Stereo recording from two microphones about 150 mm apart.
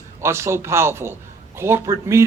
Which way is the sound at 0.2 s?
15° right (ahead or behind).